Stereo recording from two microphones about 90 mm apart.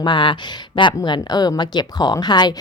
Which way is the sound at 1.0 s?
50° left (ahead or behind).